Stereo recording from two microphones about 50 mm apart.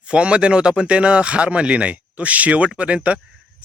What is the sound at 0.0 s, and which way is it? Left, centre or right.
Speech, right.